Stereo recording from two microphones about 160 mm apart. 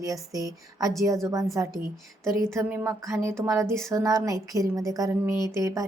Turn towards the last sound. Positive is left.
turn(degrees=-20)  # may be behind; listen again after turning